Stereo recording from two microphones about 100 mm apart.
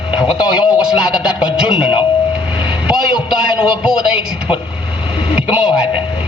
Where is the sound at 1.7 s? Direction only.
10° right (ahead or behind).